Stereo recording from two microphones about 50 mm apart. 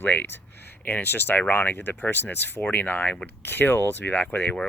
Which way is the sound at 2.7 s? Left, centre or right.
Left.